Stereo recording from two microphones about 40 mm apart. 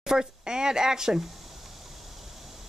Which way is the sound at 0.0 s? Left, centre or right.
Centre.